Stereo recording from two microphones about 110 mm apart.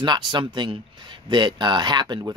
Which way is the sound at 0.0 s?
40° right (ahead or behind).